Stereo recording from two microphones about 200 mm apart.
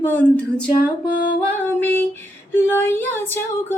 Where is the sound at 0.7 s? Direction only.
50° left (ahead or behind).